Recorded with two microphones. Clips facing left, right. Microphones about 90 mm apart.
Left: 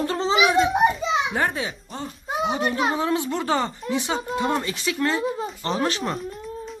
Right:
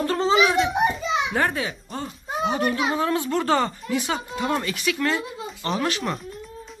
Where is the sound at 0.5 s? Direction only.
30° left (ahead or behind).